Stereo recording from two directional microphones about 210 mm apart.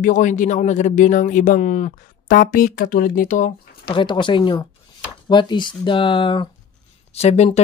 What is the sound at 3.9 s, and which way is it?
Speech, 25° left (ahead or behind).